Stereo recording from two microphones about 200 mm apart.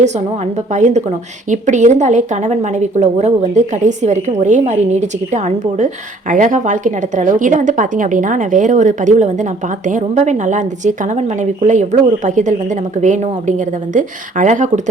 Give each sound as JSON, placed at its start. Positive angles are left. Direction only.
{"t": 0.7, "sound": "a woman's voice", "side_deg": -35}
{"t": 13.9, "sound": "a woman's voice", "side_deg": -40}